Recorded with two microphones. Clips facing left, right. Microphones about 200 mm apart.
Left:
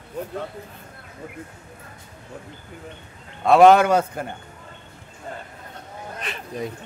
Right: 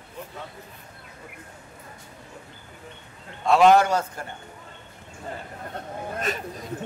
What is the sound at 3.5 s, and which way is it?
Speech, 60° left (ahead or behind).